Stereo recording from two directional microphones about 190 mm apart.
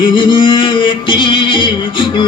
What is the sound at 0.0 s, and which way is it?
Music, 25° left (ahead or behind).